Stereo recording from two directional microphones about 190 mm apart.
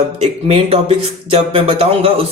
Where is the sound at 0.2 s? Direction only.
30° right (ahead or behind).